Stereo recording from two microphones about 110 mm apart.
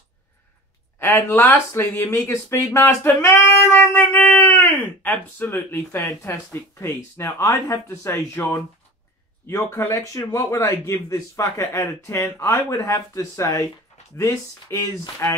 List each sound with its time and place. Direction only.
0.9 s speech: 20° left (ahead or behind)